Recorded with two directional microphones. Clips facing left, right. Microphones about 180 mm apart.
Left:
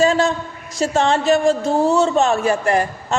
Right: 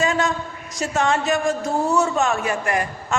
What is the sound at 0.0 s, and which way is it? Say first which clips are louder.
A man's voice: left 5 dB; 30° left (ahead or behind).